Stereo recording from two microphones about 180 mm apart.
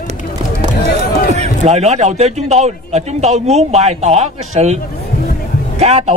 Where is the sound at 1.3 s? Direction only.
40° right (ahead or behind).